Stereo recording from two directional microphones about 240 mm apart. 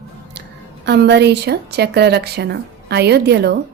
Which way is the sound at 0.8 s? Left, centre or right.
Right.